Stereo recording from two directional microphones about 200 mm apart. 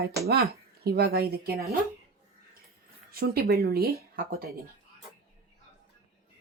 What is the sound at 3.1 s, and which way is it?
Speech, 50° right (ahead or behind).